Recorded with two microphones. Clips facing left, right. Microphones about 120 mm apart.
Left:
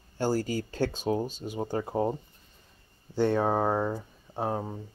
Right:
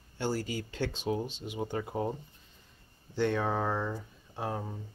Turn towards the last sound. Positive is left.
turn(degrees=35)  # may be behind; listen again after turning